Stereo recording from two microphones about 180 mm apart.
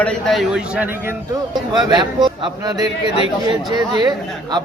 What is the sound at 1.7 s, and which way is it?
A man's voice, 25° right (ahead or behind).